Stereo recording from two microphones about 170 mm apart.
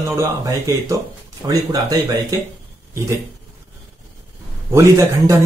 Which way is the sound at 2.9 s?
15° right (ahead or behind).